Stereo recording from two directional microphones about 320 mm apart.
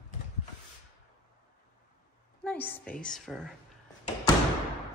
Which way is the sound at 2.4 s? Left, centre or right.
Centre.